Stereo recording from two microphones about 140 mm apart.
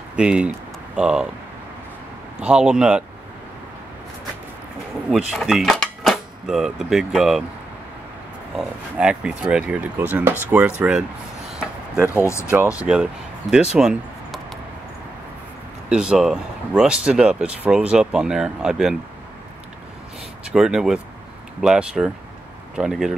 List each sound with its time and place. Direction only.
0.1 s speech: 5° right (ahead or behind)
2.4 s speech: 5° right (ahead or behind)
5.1 s speech: 5° right (ahead or behind)
8.5 s speech: 5° right (ahead or behind)
11.5 s a sound: 5° right (ahead or behind)
12.7 s speech: 5° right (ahead or behind)
15.9 s speech: 5° right (ahead or behind)
20.4 s speech: 5° right (ahead or behind)